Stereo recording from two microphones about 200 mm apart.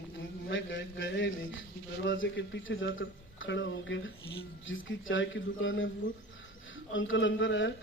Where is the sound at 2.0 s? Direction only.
65° left (ahead or behind).